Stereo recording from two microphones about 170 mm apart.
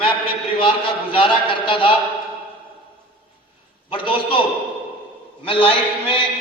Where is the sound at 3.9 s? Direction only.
30° left (ahead or behind).